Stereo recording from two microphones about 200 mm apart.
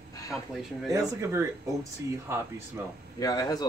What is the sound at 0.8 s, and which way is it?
Speech, 15° right (ahead or behind).